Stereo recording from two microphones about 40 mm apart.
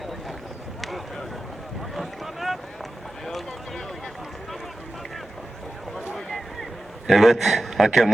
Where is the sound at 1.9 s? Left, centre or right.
Centre.